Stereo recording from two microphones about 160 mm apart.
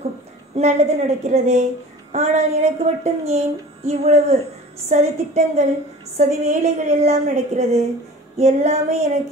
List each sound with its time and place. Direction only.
0.6 s speech: 45° right (ahead or behind)